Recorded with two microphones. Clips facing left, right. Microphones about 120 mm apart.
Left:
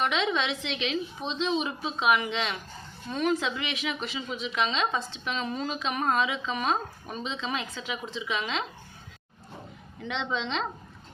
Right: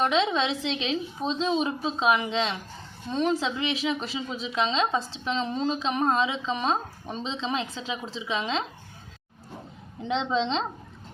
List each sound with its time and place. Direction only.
0.0 s a woman's voice: 30° right (ahead or behind)
10.0 s a woman's voice: 30° right (ahead or behind)